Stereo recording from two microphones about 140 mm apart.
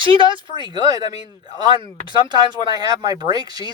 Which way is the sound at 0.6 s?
30° right (ahead or behind).